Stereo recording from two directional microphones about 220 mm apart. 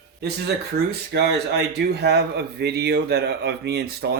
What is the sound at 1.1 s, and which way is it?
Speech, 50° right (ahead or behind).